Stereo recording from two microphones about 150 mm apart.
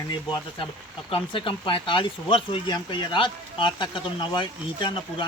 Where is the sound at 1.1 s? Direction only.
35° left (ahead or behind).